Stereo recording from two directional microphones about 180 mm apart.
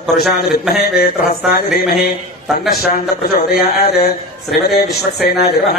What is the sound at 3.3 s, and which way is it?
Speech, 55° left (ahead or behind).